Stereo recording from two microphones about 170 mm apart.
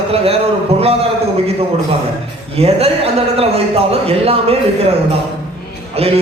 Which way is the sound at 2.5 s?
35° right (ahead or behind).